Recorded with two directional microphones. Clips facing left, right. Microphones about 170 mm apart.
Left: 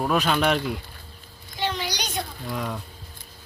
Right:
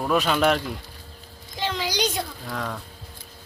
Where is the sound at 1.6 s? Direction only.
90° right.